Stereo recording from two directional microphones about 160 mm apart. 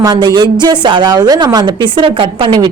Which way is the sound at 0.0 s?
25° right (ahead or behind).